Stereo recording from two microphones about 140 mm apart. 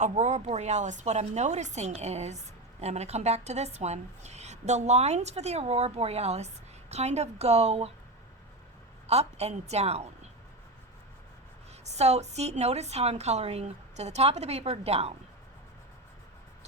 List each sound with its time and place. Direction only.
0.0 s a woman's voice: 55° right (ahead or behind)
9.0 s a woman's voice: 50° right (ahead or behind)
11.9 s a woman's voice: 50° right (ahead or behind)